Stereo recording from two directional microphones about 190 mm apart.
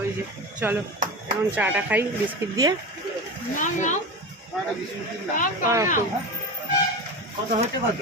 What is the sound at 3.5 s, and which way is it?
Speech, 40° left (ahead or behind).